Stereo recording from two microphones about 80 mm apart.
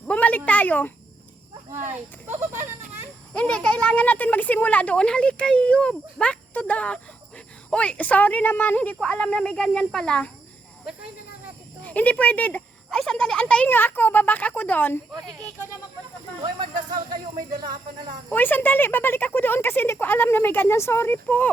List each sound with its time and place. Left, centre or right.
0.1 s speech: centre
1.7 s speech: right
3.3 s speech: centre
11.8 s speech: centre
12.9 s speech: centre
13.7 s speech: left
15.1 s speech: right
17.5 s speech: right
18.3 s speech: left